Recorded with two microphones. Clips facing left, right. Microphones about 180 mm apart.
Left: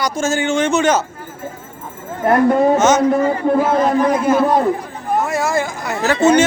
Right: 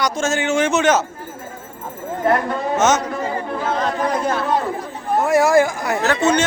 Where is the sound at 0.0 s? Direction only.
Centre (ahead or behind).